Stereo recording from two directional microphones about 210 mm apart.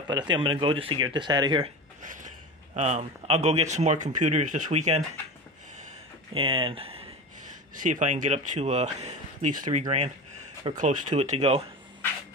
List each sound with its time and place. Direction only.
0.1 s speech: 20° right (ahead or behind)
2.0 s speech: 35° right (ahead or behind)
6.3 s speech: 25° right (ahead or behind)
7.7 s speech: 35° right (ahead or behind)
9.8 s a sound: 30° right (ahead or behind)
10.7 s speech: 40° right (ahead or behind)